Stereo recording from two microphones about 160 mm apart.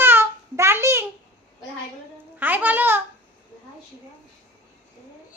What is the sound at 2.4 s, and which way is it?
Speech, 10° right (ahead or behind).